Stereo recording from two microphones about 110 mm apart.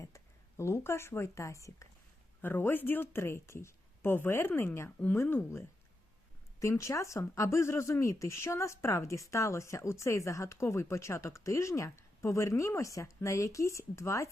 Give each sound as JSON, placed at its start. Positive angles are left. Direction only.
{"t": 0.0, "sound": "speech", "side_deg": 25}